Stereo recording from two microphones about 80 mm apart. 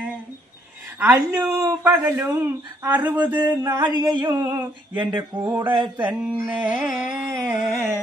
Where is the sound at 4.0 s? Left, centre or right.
Right.